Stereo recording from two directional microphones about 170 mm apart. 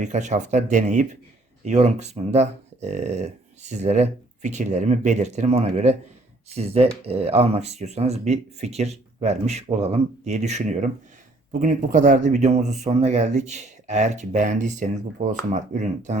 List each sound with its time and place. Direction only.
0.0 s speech: 45° right (ahead or behind)